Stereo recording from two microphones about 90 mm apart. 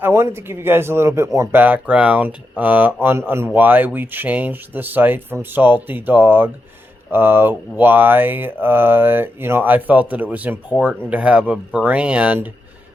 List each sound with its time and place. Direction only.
0.0 s speech: 30° right (ahead or behind)
1.5 s speech: 20° right (ahead or behind)